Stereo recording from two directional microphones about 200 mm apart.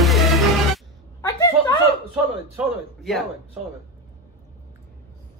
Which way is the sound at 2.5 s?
Centre (ahead or behind).